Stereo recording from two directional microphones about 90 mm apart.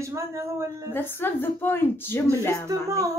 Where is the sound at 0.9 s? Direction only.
25° left (ahead or behind).